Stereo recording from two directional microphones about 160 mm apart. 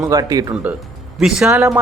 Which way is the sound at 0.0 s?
25° right (ahead or behind).